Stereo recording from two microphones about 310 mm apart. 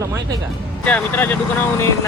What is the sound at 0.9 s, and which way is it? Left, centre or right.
Speech, centre.